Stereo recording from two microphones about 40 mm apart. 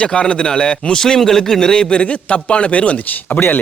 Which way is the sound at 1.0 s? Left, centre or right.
Centre.